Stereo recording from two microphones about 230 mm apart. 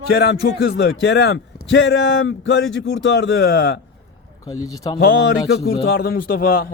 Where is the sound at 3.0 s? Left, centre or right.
Left.